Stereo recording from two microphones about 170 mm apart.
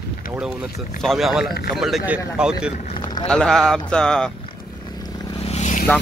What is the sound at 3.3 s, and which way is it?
Speech, 5° left (ahead or behind).